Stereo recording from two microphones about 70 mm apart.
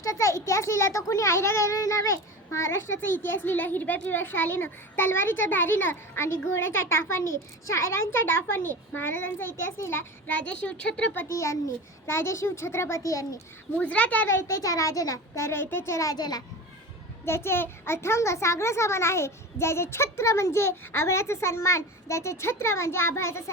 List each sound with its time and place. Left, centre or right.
0.0 s a child's voice: left
10.2 s a woman's voice: left
11.3 s a child's voice: left
13.1 s a child's voice: left
13.7 s a woman's voice: centre
14.3 s a child's voice: left
15.4 s a child's voice: left
16.1 s a child's voice: left
17.2 s a child's voice: left